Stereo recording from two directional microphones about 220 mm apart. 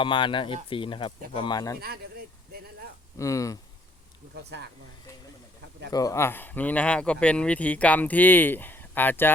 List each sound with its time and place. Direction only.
0.0 s speech: 20° left (ahead or behind)
3.2 s speech: 15° left (ahead or behind)
4.4 s speech: 50° right (ahead or behind)
5.9 s speech: 15° left (ahead or behind)